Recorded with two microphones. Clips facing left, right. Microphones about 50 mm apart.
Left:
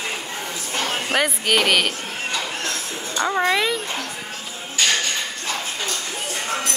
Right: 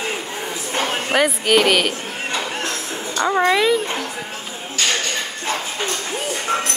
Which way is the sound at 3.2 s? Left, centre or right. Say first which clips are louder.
Right 4 dB; centre.